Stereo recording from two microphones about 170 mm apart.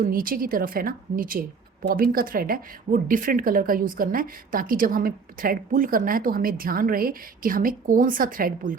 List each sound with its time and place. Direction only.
0.0 s a woman's voice: 60° right (ahead or behind)